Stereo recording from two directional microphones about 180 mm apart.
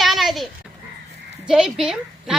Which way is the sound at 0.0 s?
Centre (ahead or behind).